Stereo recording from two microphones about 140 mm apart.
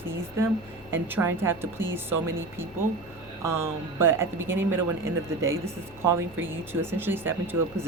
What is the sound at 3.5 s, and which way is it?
Speech, 20° right (ahead or behind).